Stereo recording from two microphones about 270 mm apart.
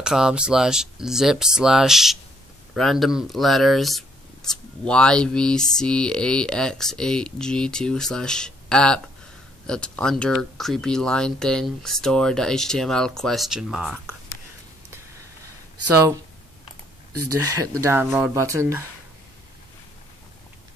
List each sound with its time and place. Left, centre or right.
0.0 s speech: centre
17.1 s speech: right
17.6 s speech: centre